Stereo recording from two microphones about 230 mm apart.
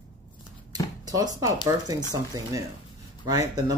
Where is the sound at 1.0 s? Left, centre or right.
Centre.